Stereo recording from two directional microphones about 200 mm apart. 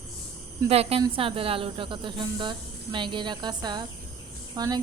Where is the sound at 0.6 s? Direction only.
30° right (ahead or behind).